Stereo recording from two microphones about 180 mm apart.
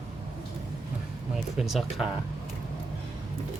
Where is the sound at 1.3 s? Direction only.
Centre (ahead or behind).